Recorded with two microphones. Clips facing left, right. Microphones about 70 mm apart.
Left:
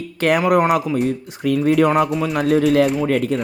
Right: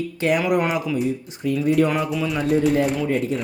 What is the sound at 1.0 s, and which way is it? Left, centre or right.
Speech, left.